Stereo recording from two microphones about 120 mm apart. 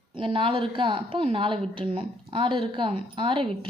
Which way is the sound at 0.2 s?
45° right (ahead or behind).